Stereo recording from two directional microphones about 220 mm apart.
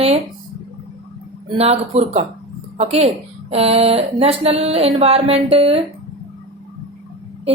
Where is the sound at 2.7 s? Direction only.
30° right (ahead or behind).